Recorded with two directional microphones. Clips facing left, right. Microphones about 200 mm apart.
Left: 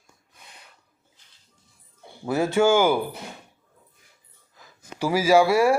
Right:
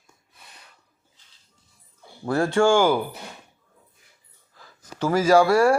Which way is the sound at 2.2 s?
5° left (ahead or behind).